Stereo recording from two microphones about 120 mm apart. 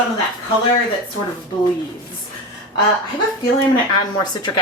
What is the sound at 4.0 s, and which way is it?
Speech, 35° left (ahead or behind).